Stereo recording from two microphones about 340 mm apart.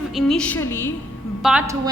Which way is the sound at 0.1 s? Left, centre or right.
Centre.